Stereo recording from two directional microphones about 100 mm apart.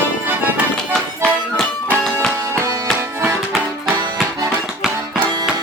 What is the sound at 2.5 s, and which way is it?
Music, 30° right (ahead or behind).